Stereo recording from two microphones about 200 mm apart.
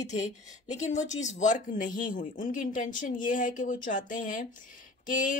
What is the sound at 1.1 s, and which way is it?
Speech, 35° left (ahead or behind).